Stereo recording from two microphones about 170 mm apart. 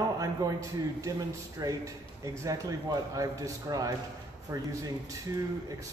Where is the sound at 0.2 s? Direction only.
20° right (ahead or behind).